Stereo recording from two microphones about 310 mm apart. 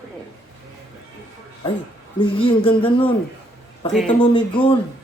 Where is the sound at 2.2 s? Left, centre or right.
Centre.